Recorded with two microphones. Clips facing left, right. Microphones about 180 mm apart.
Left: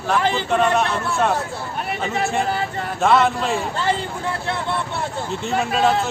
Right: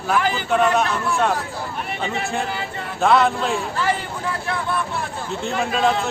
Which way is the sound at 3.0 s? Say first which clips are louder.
Even; centre (ahead or behind).